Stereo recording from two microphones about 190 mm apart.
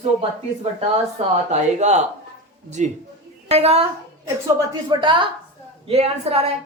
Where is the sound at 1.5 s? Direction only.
35° right (ahead or behind).